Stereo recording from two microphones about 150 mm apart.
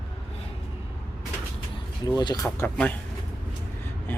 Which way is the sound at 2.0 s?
25° left (ahead or behind).